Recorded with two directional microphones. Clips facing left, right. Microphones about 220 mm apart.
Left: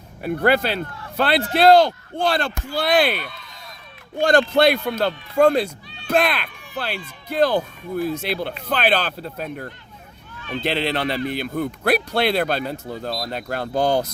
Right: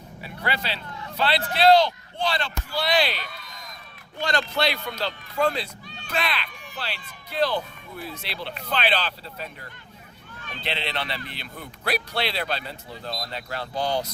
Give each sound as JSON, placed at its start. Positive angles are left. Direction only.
{"t": 0.2, "sound": "speech", "side_deg": 50}